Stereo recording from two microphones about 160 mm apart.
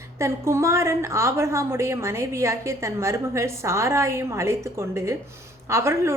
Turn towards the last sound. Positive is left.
turn(degrees=-15)  # may be behind; listen again after turning